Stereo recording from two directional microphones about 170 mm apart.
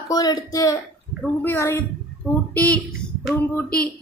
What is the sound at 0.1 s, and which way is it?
Speech, 20° left (ahead or behind).